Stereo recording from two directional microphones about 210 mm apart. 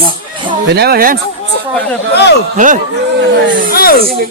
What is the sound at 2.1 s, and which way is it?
Speech, 55° left (ahead or behind).